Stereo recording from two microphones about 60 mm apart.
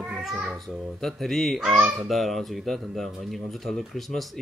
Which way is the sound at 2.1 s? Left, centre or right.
Centre.